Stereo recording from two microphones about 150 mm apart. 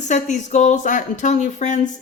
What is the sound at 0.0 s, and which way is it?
Speech, 55° left (ahead or behind).